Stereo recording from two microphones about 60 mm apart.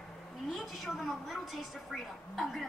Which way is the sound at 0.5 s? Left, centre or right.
Centre.